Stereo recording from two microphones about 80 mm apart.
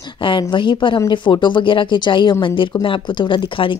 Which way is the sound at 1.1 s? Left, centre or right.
Left.